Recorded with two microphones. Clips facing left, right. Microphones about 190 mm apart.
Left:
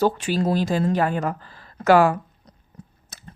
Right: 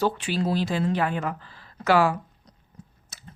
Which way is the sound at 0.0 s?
45° left (ahead or behind).